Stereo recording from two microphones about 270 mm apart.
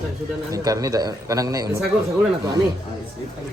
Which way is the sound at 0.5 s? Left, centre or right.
Centre.